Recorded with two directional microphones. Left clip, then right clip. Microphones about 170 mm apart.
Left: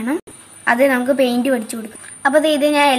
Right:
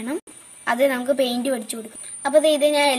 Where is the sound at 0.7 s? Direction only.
25° right (ahead or behind).